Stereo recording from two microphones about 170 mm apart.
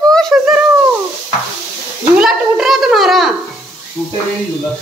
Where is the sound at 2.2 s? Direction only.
Centre (ahead or behind).